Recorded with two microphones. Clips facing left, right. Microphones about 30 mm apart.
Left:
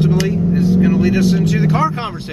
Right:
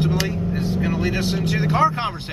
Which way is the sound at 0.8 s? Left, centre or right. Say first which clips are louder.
Left 8 dB; centre.